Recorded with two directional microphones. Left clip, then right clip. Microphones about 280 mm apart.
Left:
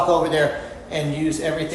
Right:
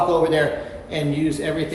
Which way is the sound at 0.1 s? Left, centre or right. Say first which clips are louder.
Even; centre.